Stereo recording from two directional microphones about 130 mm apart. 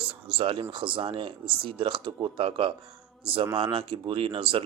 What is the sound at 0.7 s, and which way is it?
A man's voice, 40° right (ahead or behind).